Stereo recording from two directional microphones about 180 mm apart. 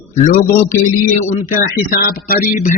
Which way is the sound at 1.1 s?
45° left (ahead or behind).